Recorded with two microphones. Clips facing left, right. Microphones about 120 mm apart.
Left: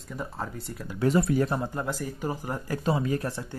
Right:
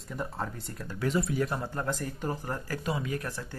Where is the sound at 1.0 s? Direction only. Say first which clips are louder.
Left 6 dB; 45° left (ahead or behind).